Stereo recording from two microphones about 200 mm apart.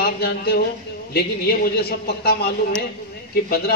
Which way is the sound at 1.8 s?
50° left (ahead or behind).